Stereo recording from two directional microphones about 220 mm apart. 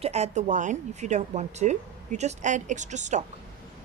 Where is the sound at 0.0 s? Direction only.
30° right (ahead or behind).